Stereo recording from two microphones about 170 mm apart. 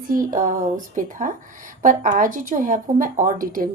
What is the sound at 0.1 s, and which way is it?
A woman's voice, 55° right (ahead or behind).